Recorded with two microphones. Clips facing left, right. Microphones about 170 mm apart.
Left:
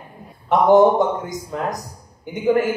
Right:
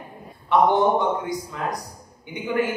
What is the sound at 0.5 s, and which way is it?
Speech, 45° left (ahead or behind).